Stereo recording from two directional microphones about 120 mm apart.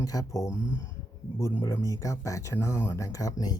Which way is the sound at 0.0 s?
30° left (ahead or behind).